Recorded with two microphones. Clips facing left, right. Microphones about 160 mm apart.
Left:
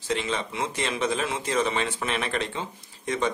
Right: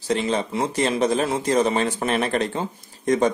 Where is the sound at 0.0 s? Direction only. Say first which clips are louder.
Right 6 dB; 35° right (ahead or behind).